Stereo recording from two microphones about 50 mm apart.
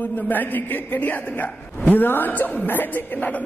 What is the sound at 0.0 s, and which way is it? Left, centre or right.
A man's voice, left.